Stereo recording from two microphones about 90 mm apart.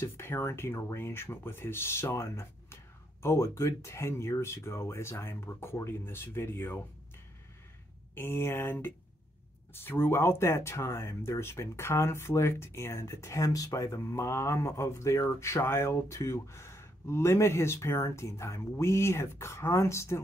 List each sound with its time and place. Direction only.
0.0 s speech: 30° left (ahead or behind)
8.1 s speech: 25° left (ahead or behind)